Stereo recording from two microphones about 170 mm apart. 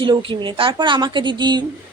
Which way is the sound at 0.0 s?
30° right (ahead or behind).